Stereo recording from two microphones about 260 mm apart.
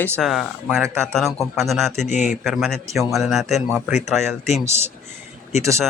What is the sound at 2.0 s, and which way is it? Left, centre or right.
Speech, left.